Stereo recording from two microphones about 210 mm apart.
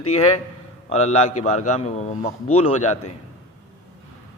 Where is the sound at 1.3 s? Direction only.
90° left.